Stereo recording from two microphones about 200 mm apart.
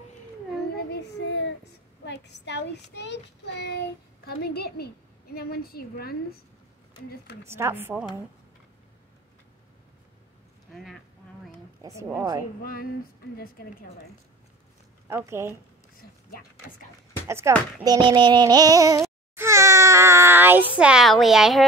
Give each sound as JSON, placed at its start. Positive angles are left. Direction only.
{"t": 0.7, "sound": "child singing", "side_deg": 55}
{"t": 4.4, "sound": "a woman's voice", "side_deg": 50}
{"t": 7.4, "sound": "a woman's voice", "side_deg": -10}
{"t": 10.7, "sound": "speech", "side_deg": 0}
{"t": 11.8, "sound": "a woman's voice", "side_deg": -15}
{"t": 15.0, "sound": "a woman's voice", "side_deg": -15}
{"t": 16.0, "sound": "a sound", "side_deg": 50}
{"t": 17.3, "sound": "a woman's voice", "side_deg": -10}
{"t": 19.3, "sound": "a sound", "side_deg": -15}
{"t": 20.7, "sound": "speech", "side_deg": -5}